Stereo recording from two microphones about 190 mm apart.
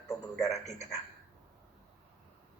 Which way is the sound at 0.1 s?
15° left (ahead or behind).